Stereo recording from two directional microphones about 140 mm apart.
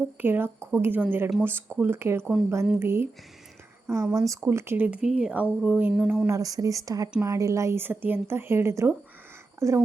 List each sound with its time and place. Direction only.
0.2 s speech: 15° right (ahead or behind)
6.2 s speech: 25° right (ahead or behind)